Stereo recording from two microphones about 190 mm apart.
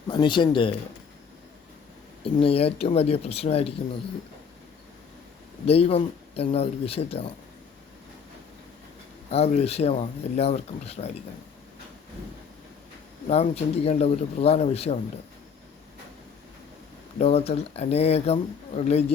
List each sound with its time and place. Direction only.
0.1 s speech: 25° left (ahead or behind)
2.2 s speech: 30° left (ahead or behind)
5.6 s speech: 30° left (ahead or behind)
9.3 s speech: 35° left (ahead or behind)
13.2 s speech: 35° left (ahead or behind)
17.2 s speech: 35° left (ahead or behind)